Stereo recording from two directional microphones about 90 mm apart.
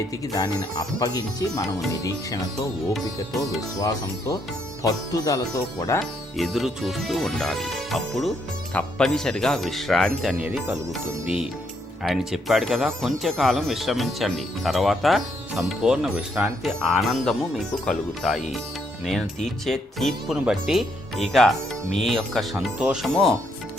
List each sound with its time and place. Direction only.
0.3 s speech: 45° left (ahead or behind)
3.8 s speech: 40° left (ahead or behind)
6.0 s speech: centre (ahead or behind)
12.0 s speech: centre (ahead or behind)
19.6 s speech: centre (ahead or behind)
22.8 s speech: 10° right (ahead or behind)
23.0 s speech: centre (ahead or behind)